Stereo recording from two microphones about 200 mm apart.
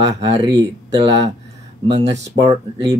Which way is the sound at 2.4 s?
20° right (ahead or behind).